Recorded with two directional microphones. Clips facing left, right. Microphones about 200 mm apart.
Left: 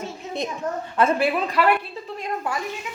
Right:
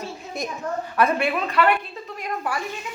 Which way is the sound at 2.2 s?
20° left (ahead or behind).